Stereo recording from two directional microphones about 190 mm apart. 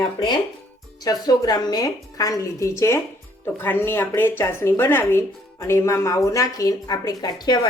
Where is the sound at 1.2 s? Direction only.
20° left (ahead or behind).